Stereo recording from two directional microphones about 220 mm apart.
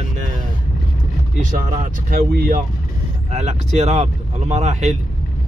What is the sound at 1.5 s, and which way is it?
Speech, 40° right (ahead or behind).